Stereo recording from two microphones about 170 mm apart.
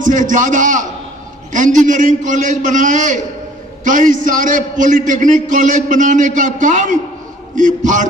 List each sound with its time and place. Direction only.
0.0 s a man's voice: 50° right (ahead or behind)